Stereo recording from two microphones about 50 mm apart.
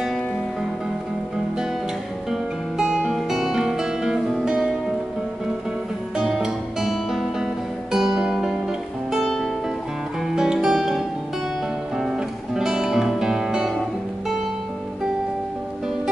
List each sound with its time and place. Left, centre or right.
2.8 s music: centre
3.1 s music: centre
6.1 s music: centre
9.2 s music: centre
10.3 s music: centre